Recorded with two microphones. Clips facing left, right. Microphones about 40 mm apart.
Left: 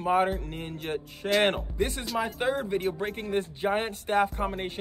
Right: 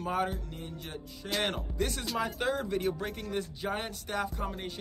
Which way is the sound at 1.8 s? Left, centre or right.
Left.